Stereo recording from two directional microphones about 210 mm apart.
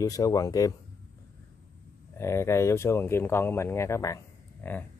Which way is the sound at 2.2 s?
15° left (ahead or behind).